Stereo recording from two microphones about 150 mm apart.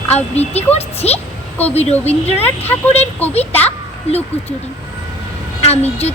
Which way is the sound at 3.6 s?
45° left (ahead or behind).